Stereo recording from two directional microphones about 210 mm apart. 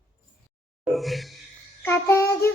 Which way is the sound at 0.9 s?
Centre (ahead or behind).